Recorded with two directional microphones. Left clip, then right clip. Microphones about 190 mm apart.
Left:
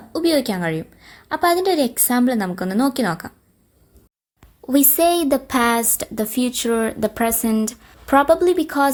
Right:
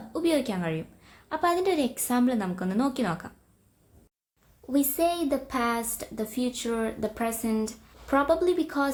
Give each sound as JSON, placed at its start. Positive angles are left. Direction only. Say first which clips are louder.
{"t": 0.1, "sound": "a woman's voice", "louder": "left 8 dB", "side_deg": 30}
{"t": 4.6, "sound": "speech", "louder": "left 9 dB", "side_deg": 50}